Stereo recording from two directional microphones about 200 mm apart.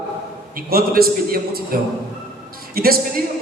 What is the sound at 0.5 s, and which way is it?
A man's voice, 50° right (ahead or behind).